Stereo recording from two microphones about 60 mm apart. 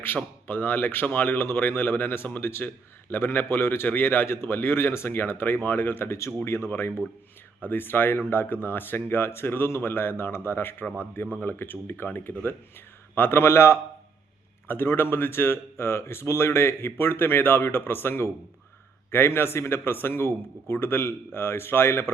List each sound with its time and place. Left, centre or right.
0.4 s speech: left
6.1 s a man's voice: left